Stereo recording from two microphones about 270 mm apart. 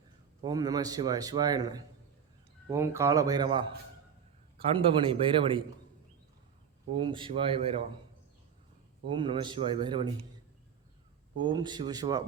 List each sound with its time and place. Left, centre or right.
0.4 s a man's voice: centre
6.9 s speech: centre
9.0 s a man's voice: centre
11.3 s a man's voice: centre